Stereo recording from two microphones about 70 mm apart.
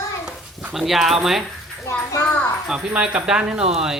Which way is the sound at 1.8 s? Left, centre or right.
Left.